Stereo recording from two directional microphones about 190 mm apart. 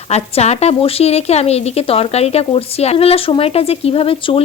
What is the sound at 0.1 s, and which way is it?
Speech, 35° left (ahead or behind).